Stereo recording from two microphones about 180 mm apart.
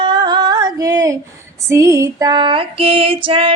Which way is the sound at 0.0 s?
25° right (ahead or behind).